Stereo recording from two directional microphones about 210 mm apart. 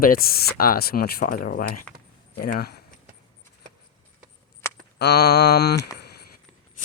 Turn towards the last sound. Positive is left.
turn(degrees=50)  # may be behind; listen again after turning